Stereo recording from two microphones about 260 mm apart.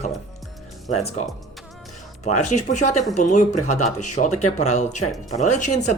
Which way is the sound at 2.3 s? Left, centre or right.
Left.